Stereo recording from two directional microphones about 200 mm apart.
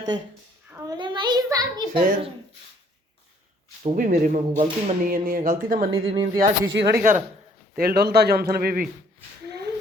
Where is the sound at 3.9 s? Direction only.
45° right (ahead or behind).